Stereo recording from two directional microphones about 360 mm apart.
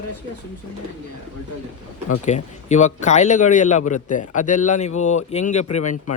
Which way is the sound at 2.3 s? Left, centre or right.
Centre.